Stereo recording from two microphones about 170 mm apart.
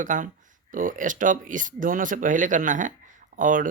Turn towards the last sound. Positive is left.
turn(degrees=-50)  # may be behind; listen again after turning